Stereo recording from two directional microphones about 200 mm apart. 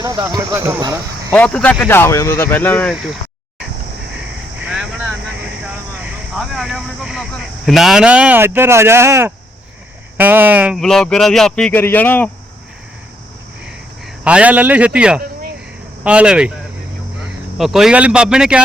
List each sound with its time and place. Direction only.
0.0 s speech: 20° right (ahead or behind)
1.3 s speech: 5° left (ahead or behind)
2.9 s speech: 5° right (ahead or behind)
4.1 s vehicle: 5° right (ahead or behind)
10.2 s speech: 10° right (ahead or behind); by 12.3 s 10° left (ahead or behind)
14.3 s speech: 5° right (ahead or behind)
17.6 s speech: centre (ahead or behind)